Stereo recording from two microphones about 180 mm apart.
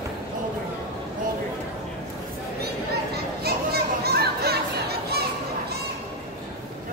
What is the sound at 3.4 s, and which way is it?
Children playing, 60° right (ahead or behind).